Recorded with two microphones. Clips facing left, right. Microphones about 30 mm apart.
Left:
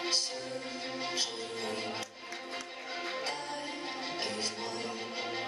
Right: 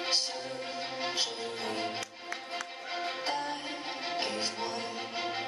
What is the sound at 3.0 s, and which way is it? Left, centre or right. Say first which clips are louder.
Music: right 4 dB; right.